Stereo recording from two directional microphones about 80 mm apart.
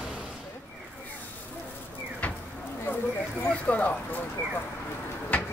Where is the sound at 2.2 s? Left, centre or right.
Centre.